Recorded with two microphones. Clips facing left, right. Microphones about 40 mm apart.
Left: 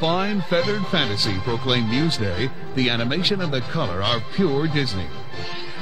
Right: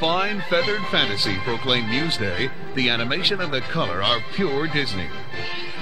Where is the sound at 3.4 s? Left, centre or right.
Right.